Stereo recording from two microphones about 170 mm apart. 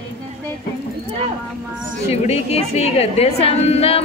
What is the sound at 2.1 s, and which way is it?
A woman's voice, 40° left (ahead or behind).